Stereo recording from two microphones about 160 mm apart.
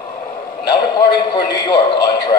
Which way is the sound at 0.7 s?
30° left (ahead or behind).